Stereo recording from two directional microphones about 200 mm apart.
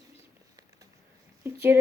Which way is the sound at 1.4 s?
10° right (ahead or behind).